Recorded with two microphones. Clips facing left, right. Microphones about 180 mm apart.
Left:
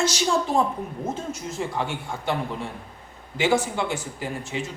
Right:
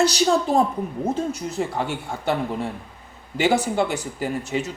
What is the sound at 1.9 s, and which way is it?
Speech, 40° right (ahead or behind).